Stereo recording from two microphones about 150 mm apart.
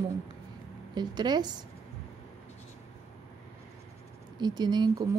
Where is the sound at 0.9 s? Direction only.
30° right (ahead or behind).